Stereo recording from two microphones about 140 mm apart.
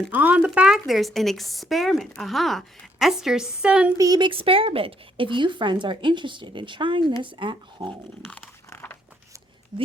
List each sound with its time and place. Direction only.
0.1 s a woman's voice: 10° right (ahead or behind)
3.9 s speech: 25° right (ahead or behind)
8.3 s biting: 10° left (ahead or behind)
9.7 s speech: 40° right (ahead or behind)